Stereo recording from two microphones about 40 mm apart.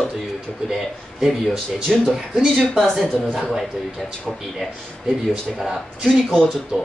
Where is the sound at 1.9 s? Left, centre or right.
Centre.